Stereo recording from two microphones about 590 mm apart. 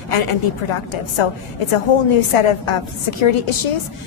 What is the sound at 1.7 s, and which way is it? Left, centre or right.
A woman's voice, left.